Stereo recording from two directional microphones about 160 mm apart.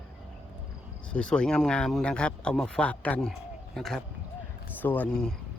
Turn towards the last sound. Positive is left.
turn(degrees=5)  # may be behind; listen again after turning